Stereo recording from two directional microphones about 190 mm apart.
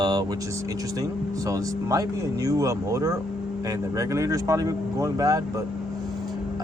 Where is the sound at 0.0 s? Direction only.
20° right (ahead or behind).